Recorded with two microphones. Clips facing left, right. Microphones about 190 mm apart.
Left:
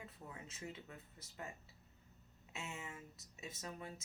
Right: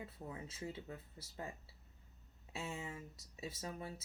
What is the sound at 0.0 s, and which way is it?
Speech, 30° right (ahead or behind).